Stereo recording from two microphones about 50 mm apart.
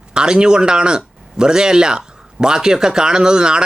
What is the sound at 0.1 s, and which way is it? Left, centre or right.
Speech, centre.